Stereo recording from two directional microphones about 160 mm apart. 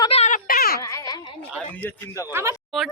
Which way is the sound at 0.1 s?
45° left (ahead or behind).